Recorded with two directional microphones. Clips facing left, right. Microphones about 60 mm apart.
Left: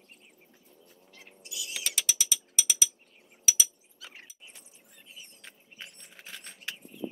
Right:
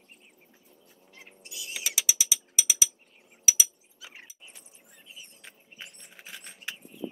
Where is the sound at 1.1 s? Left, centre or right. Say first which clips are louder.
Even; right.